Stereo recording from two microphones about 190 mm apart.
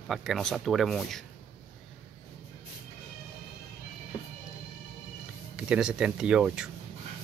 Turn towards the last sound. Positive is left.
turn(degrees=-5)  # may be behind; listen again after turning